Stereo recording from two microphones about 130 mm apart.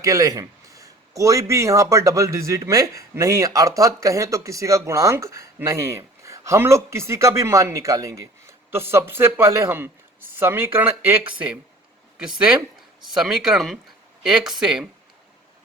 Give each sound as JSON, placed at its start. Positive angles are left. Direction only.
{"t": 0.0, "sound": "speech", "side_deg": -25}
{"t": 13.1, "sound": "speech", "side_deg": -5}